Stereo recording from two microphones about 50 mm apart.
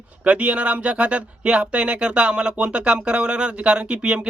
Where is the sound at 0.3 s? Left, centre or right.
Right.